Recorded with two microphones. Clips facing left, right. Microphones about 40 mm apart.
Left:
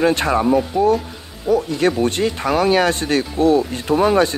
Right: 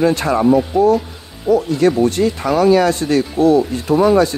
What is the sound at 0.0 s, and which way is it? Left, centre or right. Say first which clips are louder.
Speech: right 1 dB; left.